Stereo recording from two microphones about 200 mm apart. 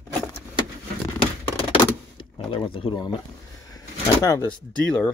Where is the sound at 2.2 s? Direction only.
25° left (ahead or behind).